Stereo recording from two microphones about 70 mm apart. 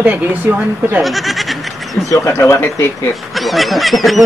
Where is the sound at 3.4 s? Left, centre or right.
Centre.